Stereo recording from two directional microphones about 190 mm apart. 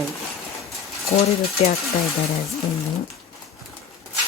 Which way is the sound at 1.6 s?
30° left (ahead or behind).